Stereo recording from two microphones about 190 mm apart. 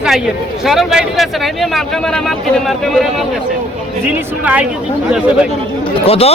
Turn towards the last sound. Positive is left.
turn(degrees=30)  # may be behind; listen again after turning